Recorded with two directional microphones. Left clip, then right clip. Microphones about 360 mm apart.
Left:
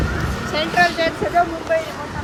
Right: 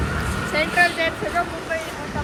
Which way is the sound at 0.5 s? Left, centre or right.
Left.